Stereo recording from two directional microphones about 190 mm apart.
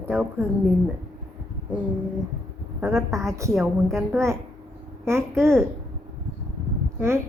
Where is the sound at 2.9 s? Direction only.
15° right (ahead or behind).